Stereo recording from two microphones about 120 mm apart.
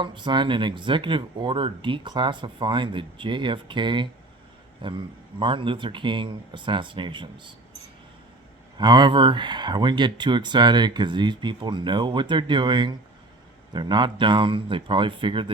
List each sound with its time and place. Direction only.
0.0 s speech: 40° right (ahead or behind)
8.8 s speech: 40° right (ahead or behind)